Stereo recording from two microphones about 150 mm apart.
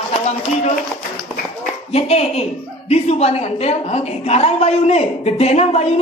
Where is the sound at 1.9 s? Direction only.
45° left (ahead or behind).